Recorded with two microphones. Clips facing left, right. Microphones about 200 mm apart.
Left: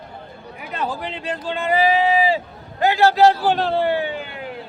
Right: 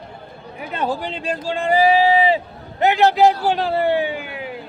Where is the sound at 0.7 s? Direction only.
30° right (ahead or behind); by 3.9 s 5° right (ahead or behind).